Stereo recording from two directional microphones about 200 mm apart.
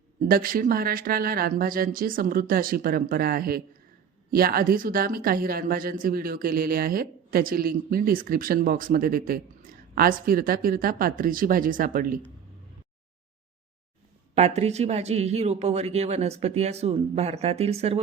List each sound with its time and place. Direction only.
0.3 s a woman's voice: 45° right (ahead or behind)
14.3 s speech: 35° right (ahead or behind)